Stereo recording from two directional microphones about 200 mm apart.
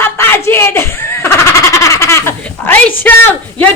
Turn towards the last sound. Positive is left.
turn(degrees=10)  # may be behind; listen again after turning